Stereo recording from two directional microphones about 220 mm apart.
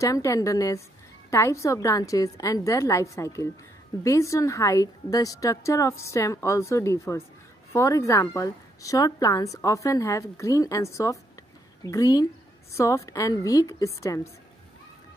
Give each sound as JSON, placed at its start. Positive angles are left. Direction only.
{"t": 0.0, "sound": "a woman's voice", "side_deg": 15}